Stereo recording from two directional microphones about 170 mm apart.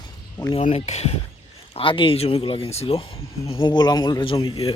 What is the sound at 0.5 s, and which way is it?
Speech, 40° left (ahead or behind).